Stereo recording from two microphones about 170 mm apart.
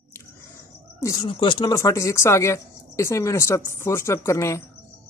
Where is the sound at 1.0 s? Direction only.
25° left (ahead or behind).